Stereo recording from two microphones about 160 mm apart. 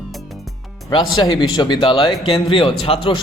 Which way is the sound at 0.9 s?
25° left (ahead or behind).